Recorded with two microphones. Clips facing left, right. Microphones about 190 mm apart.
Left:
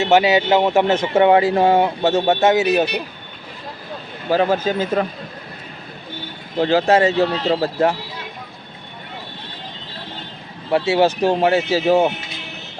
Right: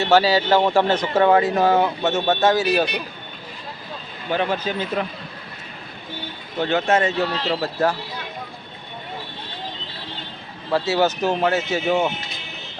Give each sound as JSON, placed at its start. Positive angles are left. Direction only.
{"t": 0.0, "sound": "speech", "side_deg": 20}
{"t": 4.3, "sound": "speech", "side_deg": 40}
{"t": 6.6, "sound": "speech", "side_deg": 30}
{"t": 10.7, "sound": "speech", "side_deg": 25}